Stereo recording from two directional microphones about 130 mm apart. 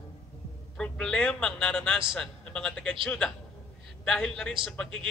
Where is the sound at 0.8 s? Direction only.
5° left (ahead or behind).